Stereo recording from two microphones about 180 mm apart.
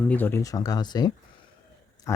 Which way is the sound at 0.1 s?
10° left (ahead or behind).